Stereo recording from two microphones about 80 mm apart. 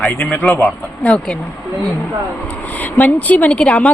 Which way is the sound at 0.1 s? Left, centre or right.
Centre.